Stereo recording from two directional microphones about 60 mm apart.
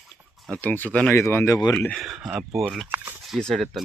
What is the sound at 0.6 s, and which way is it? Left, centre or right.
Speech, left.